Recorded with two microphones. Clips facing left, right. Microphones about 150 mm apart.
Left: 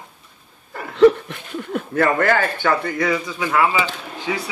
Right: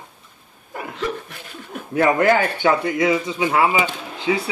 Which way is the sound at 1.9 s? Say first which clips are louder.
Right 2 dB; 10° right (ahead or behind).